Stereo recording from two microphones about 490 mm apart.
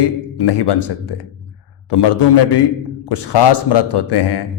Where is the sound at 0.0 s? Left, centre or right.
Left.